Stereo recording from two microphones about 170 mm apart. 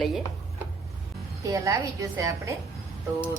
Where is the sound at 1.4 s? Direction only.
20° right (ahead or behind).